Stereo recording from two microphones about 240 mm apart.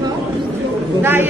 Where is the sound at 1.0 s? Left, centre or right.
Centre.